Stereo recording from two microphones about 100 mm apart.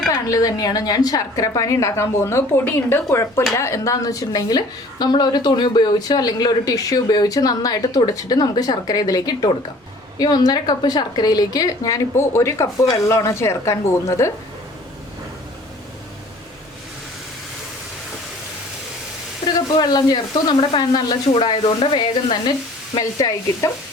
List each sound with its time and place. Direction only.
0.1 s a woman's voice: 35° left (ahead or behind)
19.5 s speech: 40° left (ahead or behind)
21.3 s speech: 60° left (ahead or behind)
23.0 s a woman's voice: 40° left (ahead or behind)